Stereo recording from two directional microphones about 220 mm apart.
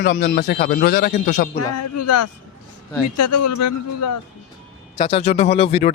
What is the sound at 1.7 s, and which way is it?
Speech, 90° left.